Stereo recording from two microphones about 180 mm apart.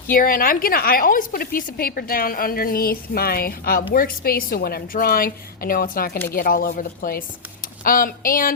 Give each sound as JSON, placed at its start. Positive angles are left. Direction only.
{"t": 0.1, "sound": "a woman's voice", "side_deg": 50}